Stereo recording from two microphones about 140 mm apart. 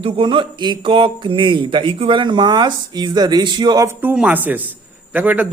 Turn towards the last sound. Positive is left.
turn(degrees=-10)  # may be behind; listen again after turning